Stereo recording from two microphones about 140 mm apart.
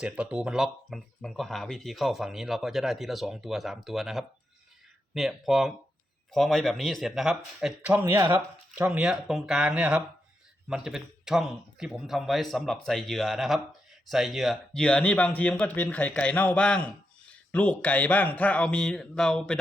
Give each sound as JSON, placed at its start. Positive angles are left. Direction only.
{"t": 0.0, "sound": "speech", "side_deg": -10}
{"t": 8.8, "sound": "speech", "side_deg": -5}